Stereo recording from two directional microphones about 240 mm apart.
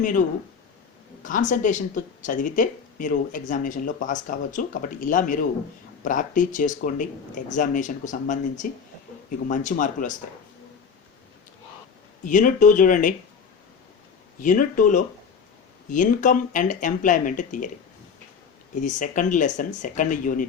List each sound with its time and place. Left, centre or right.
1.2 s speech: left
12.2 s speech: left
14.4 s speech: left
18.7 s speech: left